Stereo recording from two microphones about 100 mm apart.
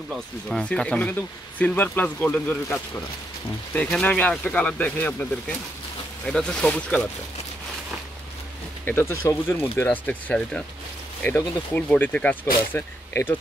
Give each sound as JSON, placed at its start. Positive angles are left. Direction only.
{"t": 0.1, "sound": "speech", "side_deg": 5}
{"t": 3.7, "sound": "speech", "side_deg": 10}
{"t": 8.8, "sound": "speech", "side_deg": 25}
{"t": 9.8, "sound": "speech", "side_deg": 15}